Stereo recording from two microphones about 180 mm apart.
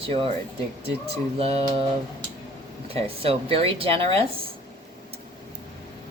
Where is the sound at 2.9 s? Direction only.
35° right (ahead or behind).